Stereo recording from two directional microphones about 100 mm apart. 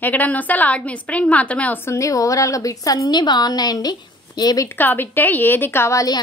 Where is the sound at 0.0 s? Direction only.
15° left (ahead or behind); by 4.6 s 40° left (ahead or behind).